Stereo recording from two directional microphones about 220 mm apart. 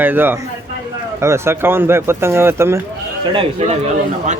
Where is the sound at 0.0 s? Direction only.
10° right (ahead or behind).